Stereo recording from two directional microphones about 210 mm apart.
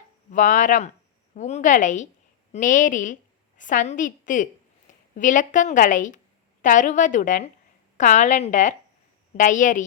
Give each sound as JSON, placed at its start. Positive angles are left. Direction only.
{"t": 0.3, "sound": "a woman's voice", "side_deg": 40}